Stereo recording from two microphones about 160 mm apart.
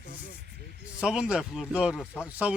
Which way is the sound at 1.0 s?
5° right (ahead or behind).